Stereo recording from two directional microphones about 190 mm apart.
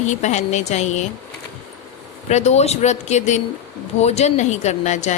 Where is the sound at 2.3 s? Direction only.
35° left (ahead or behind).